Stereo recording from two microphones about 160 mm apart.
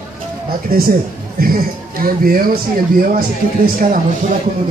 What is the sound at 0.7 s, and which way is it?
A child's voice, 70° right (ahead or behind).